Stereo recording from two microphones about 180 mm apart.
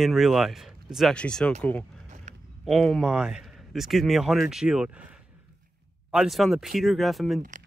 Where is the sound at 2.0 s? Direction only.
40° right (ahead or behind).